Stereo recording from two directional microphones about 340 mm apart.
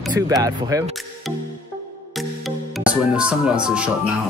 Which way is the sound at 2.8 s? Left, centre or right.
Centre.